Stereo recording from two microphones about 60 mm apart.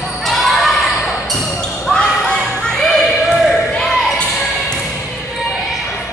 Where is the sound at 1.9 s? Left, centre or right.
Centre.